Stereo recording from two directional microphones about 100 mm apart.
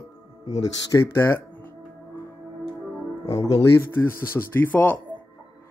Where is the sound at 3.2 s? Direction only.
35° left (ahead or behind).